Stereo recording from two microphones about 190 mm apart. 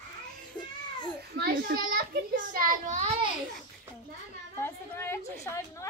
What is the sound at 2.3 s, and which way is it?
Speech, 45° right (ahead or behind).